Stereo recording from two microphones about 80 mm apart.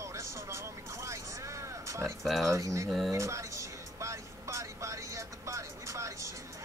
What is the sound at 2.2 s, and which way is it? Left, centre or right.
Speech, centre.